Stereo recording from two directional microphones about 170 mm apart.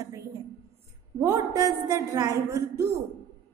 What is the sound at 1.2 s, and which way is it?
A woman's voice, 20° right (ahead or behind).